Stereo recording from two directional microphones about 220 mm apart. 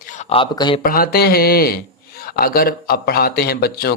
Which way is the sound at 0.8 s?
40° left (ahead or behind).